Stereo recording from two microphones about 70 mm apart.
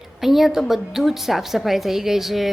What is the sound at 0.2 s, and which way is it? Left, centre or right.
A woman's voice, centre.